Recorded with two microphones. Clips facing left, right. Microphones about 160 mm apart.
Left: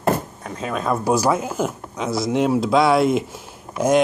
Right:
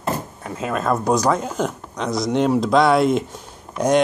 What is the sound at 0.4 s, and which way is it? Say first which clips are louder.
Speech: right 2 dB; 5° right (ahead or behind).